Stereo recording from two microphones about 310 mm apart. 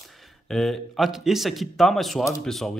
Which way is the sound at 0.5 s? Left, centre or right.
Centre.